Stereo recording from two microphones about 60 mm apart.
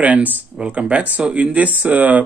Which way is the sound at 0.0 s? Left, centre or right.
Right.